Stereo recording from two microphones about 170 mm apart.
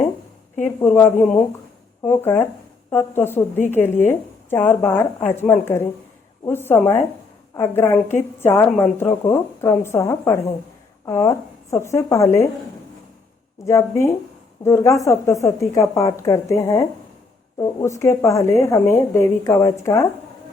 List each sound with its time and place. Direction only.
0.6 s a woman's voice: 10° left (ahead or behind)
13.7 s a woman's voice: 15° left (ahead or behind)